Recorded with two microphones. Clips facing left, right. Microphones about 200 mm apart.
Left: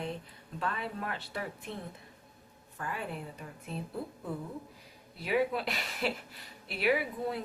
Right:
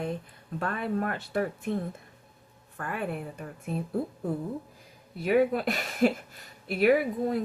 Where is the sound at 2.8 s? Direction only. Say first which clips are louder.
Right 5 dB; 55° right (ahead or behind).